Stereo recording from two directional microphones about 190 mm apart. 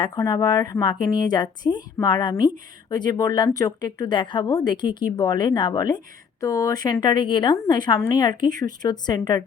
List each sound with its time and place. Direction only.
0.0 s a woman's voice: 20° left (ahead or behind)